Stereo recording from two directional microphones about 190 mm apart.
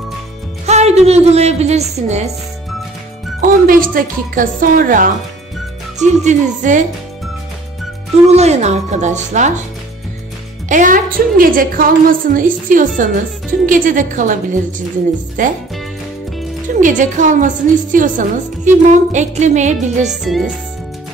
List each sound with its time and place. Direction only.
0.7 s a woman's voice: 35° right (ahead or behind)
3.3 s a woman's voice: 45° right (ahead or behind)
8.3 s a woman's voice: 35° right (ahead or behind)
10.7 s a woman's voice: 45° right (ahead or behind)
16.8 s a woman's voice: 40° right (ahead or behind)
20.1 s speech: centre (ahead or behind)